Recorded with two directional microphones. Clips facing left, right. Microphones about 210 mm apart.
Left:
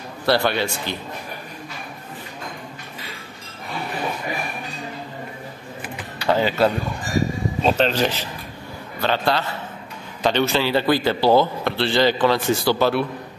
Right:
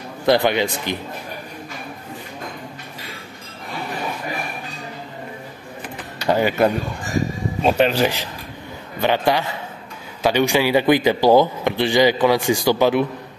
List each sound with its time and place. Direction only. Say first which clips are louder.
0.3 s speech: right 3 dB; 15° right (ahead or behind)
6.2 s speech: right 1 dB; 15° right (ahead or behind)